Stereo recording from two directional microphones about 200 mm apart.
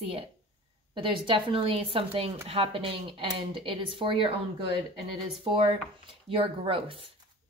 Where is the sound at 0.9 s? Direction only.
25° right (ahead or behind).